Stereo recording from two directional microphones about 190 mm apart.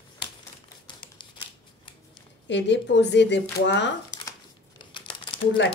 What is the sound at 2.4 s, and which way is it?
Speech, 70° left (ahead or behind).